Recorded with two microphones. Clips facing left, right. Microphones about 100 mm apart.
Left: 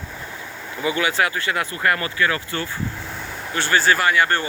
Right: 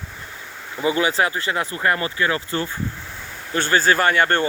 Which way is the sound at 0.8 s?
30° right (ahead or behind).